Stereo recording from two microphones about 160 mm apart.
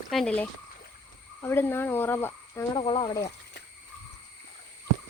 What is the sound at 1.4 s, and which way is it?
Speech, 15° left (ahead or behind).